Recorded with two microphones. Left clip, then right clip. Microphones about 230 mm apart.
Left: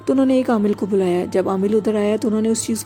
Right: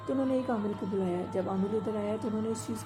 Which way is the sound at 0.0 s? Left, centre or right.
Left.